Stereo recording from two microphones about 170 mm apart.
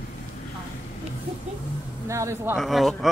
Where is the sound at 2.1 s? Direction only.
15° right (ahead or behind).